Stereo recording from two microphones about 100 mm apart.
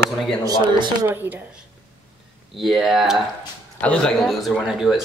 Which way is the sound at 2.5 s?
5° right (ahead or behind).